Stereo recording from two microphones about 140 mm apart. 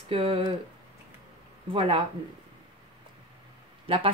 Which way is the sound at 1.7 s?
40° right (ahead or behind).